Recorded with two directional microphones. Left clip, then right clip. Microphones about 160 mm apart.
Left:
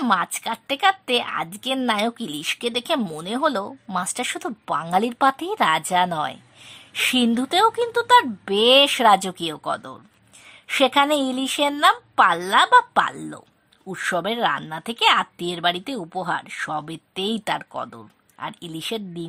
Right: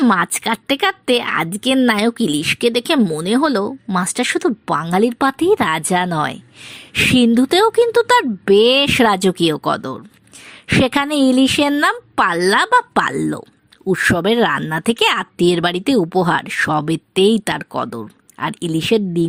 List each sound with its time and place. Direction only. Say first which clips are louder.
0.1 s speech: right 5 dB; 25° right (ahead or behind)